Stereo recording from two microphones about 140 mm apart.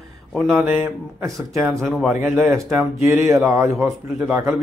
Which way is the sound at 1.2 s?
20° right (ahead or behind).